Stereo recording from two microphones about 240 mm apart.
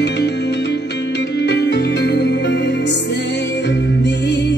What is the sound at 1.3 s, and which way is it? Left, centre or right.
Music, left.